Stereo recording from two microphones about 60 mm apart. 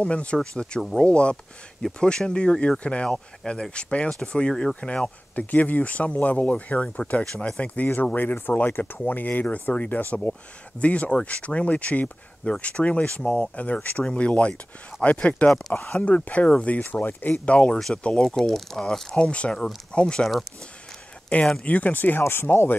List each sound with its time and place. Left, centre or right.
0.0 s speech: centre
0.4 s speech: centre; by 6.9 s left
7.3 s speech: centre
7.6 s speech: left
17.5 s speech: centre
21.6 s speech: left
22.2 s speech: left